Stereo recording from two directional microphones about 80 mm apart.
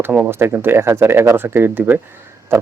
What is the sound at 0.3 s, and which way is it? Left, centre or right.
Speech, right.